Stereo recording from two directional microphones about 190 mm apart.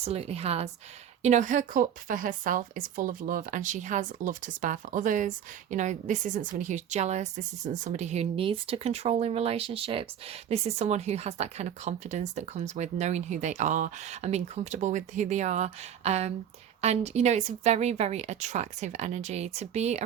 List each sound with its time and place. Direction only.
0.0 s a woman's voice: 30° right (ahead or behind)